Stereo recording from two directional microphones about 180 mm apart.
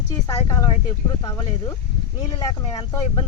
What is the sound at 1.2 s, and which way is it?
Speech, 15° left (ahead or behind).